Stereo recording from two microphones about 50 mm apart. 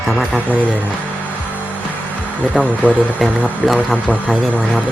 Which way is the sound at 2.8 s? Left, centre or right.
Right.